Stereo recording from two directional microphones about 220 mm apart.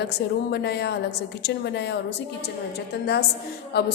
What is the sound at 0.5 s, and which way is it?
A woman's voice, 50° left (ahead or behind).